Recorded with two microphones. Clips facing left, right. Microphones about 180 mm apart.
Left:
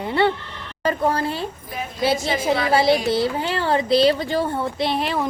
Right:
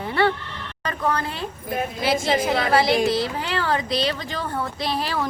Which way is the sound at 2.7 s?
25° left (ahead or behind).